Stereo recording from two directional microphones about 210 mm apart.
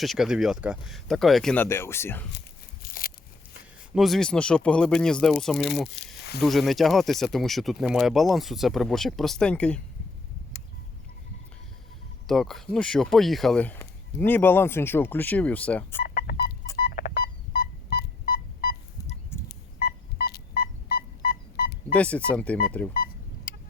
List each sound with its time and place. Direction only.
0.0 s speech: centre (ahead or behind)
2.8 s a sound: 45° left (ahead or behind)
3.9 s speech: centre (ahead or behind)
6.0 s snake: 50° left (ahead or behind)
6.4 s speech: centre (ahead or behind)
12.3 s speech: centre (ahead or behind)
16.0 s a sound: 45° left (ahead or behind)
16.7 s telephone dialing: 45° left (ahead or behind)
19.5 s a sound: 50° left (ahead or behind)
21.9 s speech: 5° left (ahead or behind)